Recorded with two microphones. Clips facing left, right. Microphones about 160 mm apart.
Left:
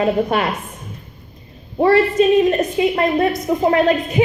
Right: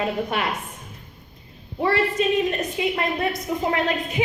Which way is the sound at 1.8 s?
40° left (ahead or behind).